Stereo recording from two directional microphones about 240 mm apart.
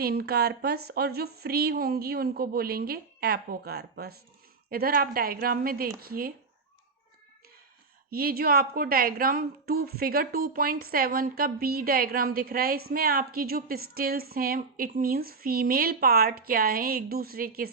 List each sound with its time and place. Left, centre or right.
0.0 s a woman's voice: right
8.1 s a woman's voice: right